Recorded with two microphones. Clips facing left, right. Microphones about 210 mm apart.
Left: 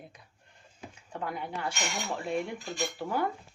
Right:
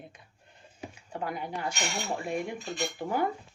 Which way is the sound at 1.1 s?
10° right (ahead or behind).